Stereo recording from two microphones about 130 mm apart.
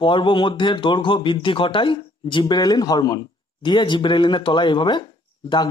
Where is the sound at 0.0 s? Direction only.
40° left (ahead or behind).